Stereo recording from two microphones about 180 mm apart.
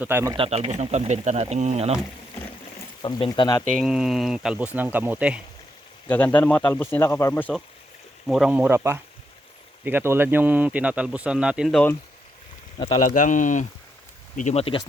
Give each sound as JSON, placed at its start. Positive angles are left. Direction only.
{"t": 0.0, "sound": "a man's voice", "side_deg": -15}
{"t": 0.3, "sound": "speech", "side_deg": -35}
{"t": 3.0, "sound": "speech", "side_deg": 25}
{"t": 3.7, "sound": "a man's voice", "side_deg": 0}
{"t": 6.1, "sound": "speech", "side_deg": 10}
{"t": 8.3, "sound": "a man's voice", "side_deg": -5}
{"t": 13.1, "sound": "speech", "side_deg": 45}